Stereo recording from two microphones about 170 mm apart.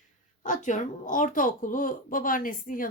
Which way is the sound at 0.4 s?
50° left (ahead or behind).